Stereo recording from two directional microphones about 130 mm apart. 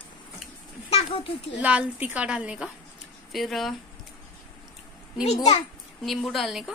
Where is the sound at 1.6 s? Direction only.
10° right (ahead or behind).